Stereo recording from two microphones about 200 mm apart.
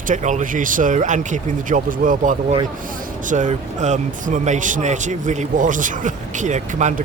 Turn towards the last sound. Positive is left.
turn(degrees=-35)  # may be behind; listen again after turning